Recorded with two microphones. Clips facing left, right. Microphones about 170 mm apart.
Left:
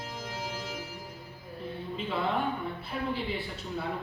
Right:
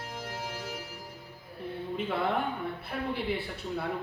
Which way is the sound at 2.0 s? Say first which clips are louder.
Even; 65° right (ahead or behind).